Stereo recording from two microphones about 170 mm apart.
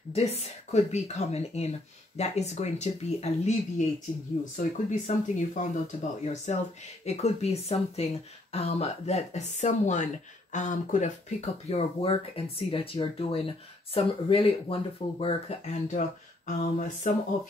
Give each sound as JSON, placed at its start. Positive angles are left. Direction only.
{"t": 0.1, "sound": "speech", "side_deg": 40}
{"t": 16.4, "sound": "speech", "side_deg": 45}